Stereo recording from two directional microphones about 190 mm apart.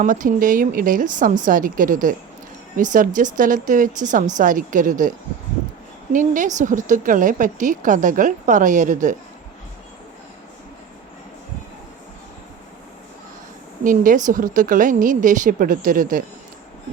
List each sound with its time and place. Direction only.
0.0 s a woman's voice: 45° right (ahead or behind)
6.1 s a woman's voice: 40° right (ahead or behind)
13.8 s a woman's voice: 45° right (ahead or behind)